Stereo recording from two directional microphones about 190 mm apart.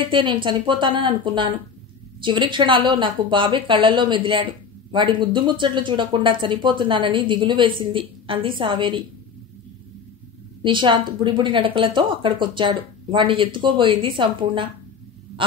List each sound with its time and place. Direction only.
0.1 s a woman's voice: 25° right (ahead or behind)
10.6 s a woman's voice: 25° right (ahead or behind)